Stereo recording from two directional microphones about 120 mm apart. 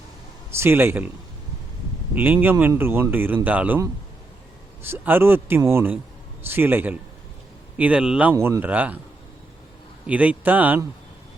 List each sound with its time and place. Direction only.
0.6 s speech: 20° right (ahead or behind)
2.1 s speech: 15° right (ahead or behind)
4.9 s speech: 20° right (ahead or behind)
10.1 s speech: 10° right (ahead or behind)